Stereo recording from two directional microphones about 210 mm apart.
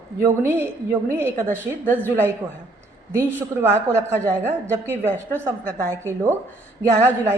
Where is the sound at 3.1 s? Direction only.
10° right (ahead or behind).